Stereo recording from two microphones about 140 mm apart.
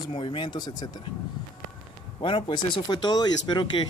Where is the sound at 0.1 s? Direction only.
35° left (ahead or behind).